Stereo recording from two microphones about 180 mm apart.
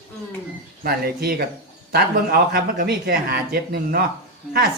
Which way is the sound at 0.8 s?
55° right (ahead or behind).